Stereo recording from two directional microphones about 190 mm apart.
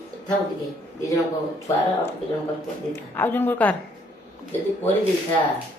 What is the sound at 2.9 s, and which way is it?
Speech, 10° left (ahead or behind).